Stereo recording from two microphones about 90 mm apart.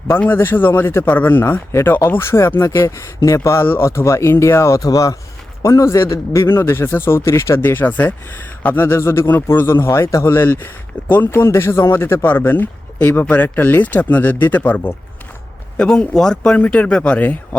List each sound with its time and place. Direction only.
0.2 s a man's voice: 25° left (ahead or behind)
10.3 s a man's voice: 25° left (ahead or behind)